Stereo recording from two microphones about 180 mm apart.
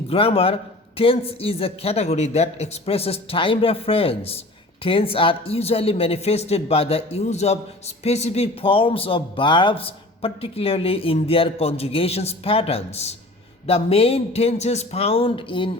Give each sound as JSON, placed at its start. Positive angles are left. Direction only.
{"t": 0.1, "sound": "speech", "side_deg": 30}